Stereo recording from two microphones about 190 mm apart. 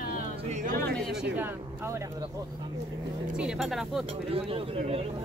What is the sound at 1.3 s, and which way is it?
Speech, 10° right (ahead or behind).